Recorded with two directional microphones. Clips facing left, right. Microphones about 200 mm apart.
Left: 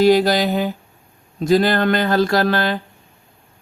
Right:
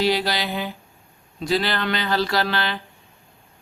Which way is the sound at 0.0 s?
45° left (ahead or behind).